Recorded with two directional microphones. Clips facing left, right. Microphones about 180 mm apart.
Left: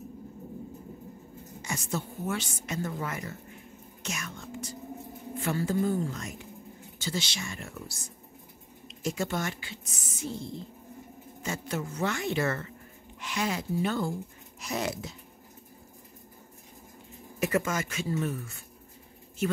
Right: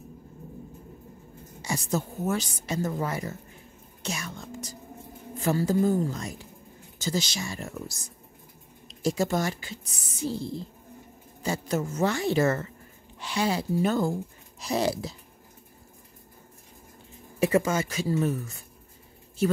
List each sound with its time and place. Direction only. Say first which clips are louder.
1.6 s a woman's voice: right 5 dB; 35° right (ahead or behind)
4.0 s whispering: right 3 dB; 35° right (ahead or behind)
5.4 s a woman's voice: right 4 dB; 40° right (ahead or behind)
17.4 s a woman's voice: right 5 dB; 30° right (ahead or behind)